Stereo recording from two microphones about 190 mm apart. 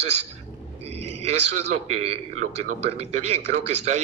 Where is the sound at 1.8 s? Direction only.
35° right (ahead or behind).